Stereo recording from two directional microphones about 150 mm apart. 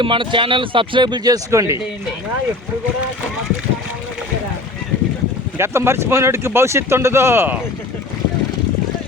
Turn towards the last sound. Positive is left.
turn(degrees=-15)  # may be behind; listen again after turning